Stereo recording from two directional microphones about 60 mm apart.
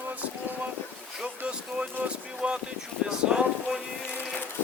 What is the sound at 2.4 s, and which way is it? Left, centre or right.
Speech, centre.